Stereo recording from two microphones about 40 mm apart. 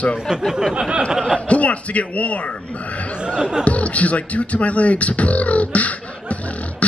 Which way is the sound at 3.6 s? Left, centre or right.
Left.